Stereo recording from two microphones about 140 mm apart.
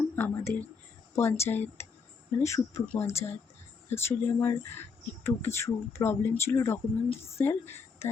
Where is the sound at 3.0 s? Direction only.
50° left (ahead or behind).